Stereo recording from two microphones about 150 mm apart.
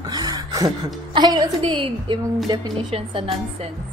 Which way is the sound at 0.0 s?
25° right (ahead or behind).